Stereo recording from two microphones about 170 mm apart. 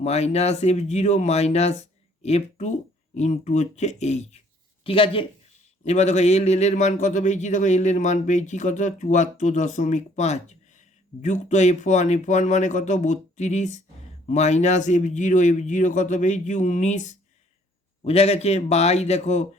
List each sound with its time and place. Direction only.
0.0 s a man's voice: 40° left (ahead or behind)